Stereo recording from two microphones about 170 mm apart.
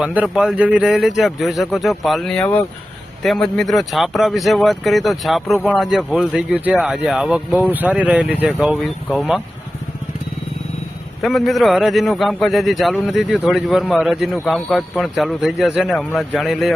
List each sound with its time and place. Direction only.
0.0 s speech: 10° right (ahead or behind)
11.2 s speech: centre (ahead or behind)